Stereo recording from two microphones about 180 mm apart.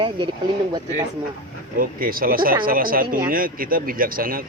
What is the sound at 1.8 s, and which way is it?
Speech, 55° right (ahead or behind).